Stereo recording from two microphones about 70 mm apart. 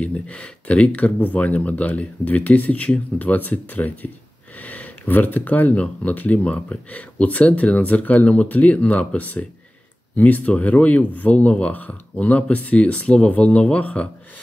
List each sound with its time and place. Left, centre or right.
0.0 s speech: centre